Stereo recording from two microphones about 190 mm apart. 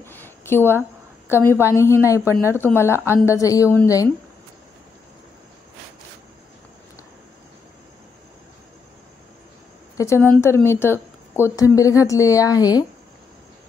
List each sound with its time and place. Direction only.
0.0 s a sound: 10° left (ahead or behind)
1.3 s speech: 15° left (ahead or behind)
9.9 s a woman's voice: 15° left (ahead or behind)